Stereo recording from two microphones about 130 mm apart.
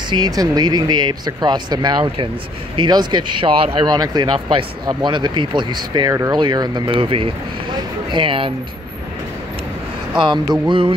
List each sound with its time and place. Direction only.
0.1 s speech: 30° right (ahead or behind)
10.1 s speech: 35° right (ahead or behind)